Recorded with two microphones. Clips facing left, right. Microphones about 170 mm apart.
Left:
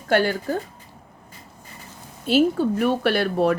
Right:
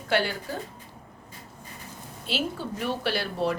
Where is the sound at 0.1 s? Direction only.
45° left (ahead or behind).